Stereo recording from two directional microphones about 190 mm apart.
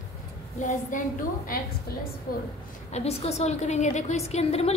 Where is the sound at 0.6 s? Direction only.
45° left (ahead or behind).